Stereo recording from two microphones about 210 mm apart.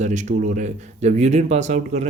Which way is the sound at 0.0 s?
35° right (ahead or behind).